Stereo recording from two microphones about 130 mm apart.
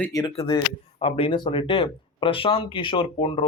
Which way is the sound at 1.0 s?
45° left (ahead or behind).